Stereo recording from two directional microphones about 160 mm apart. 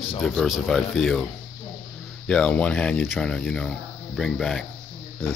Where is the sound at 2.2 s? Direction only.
5° left (ahead or behind).